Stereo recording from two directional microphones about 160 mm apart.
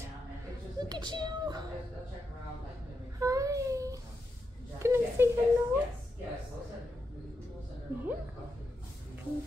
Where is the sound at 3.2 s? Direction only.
20° right (ahead or behind).